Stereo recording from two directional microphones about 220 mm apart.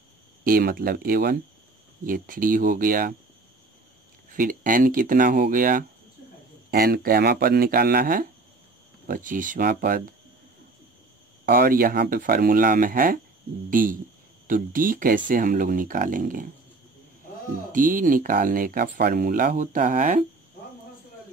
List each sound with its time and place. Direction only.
0.4 s speech: 40° right (ahead or behind)
4.3 s speech: 40° right (ahead or behind)
11.4 s speech: 45° right (ahead or behind)
17.7 s speech: 40° right (ahead or behind)